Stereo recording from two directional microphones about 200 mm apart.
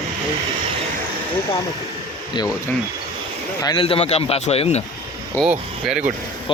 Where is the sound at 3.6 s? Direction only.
20° left (ahead or behind).